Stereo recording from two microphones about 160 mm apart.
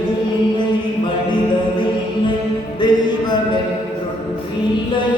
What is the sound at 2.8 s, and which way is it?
Music, 25° left (ahead or behind).